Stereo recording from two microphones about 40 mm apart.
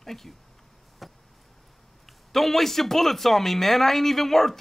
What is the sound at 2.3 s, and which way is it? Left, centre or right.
Speech, centre.